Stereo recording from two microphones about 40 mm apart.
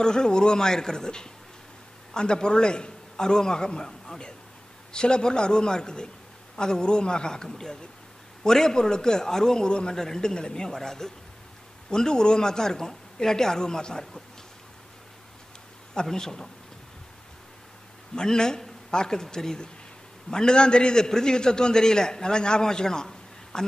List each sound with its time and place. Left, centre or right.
0.0 s a man's voice: centre
4.9 s a man's voice: left
16.1 s a man's voice: centre
18.1 s a man's voice: centre